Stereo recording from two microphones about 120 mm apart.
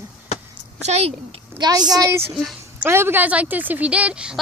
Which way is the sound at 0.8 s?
60° right (ahead or behind).